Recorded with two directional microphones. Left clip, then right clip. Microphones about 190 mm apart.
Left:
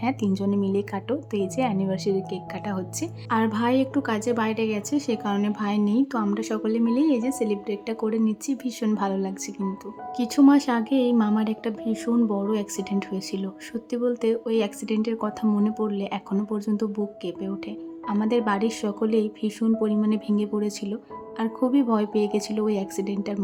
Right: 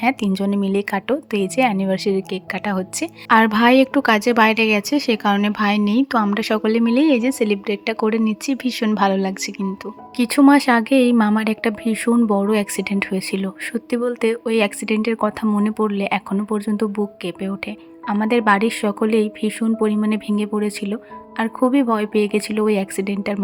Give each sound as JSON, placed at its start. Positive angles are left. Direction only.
{"t": 0.0, "sound": "speech", "side_deg": -20}